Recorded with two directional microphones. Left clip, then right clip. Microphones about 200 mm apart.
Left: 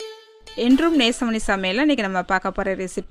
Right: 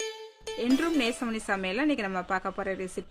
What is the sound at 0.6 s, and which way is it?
A woman's voice, 45° left (ahead or behind).